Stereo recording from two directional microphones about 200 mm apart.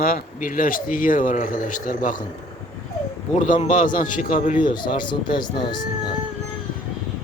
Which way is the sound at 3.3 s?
40° left (ahead or behind).